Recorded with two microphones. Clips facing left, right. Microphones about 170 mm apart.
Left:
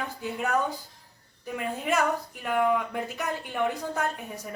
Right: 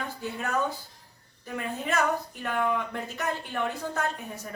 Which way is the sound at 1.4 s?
10° left (ahead or behind).